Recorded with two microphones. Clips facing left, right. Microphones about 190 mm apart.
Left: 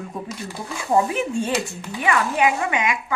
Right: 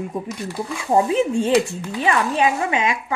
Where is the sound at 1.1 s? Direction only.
20° right (ahead or behind).